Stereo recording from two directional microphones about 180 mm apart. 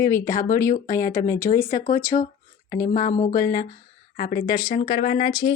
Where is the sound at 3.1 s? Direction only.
40° left (ahead or behind).